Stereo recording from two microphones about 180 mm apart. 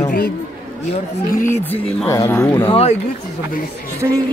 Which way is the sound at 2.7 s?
35° left (ahead or behind).